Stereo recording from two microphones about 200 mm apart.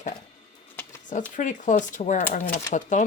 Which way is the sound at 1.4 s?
40° left (ahead or behind).